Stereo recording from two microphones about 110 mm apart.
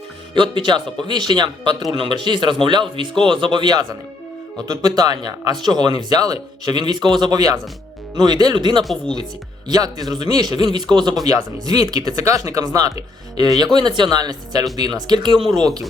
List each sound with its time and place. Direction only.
0.3 s speech: 45° right (ahead or behind)
8.8 s speech: centre (ahead or behind)
9.6 s speech: 35° right (ahead or behind)